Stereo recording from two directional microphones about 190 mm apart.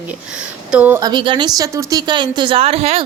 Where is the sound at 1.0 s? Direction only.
25° right (ahead or behind).